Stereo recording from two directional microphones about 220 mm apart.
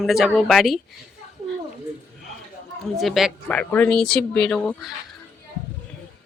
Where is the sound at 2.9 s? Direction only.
Centre (ahead or behind).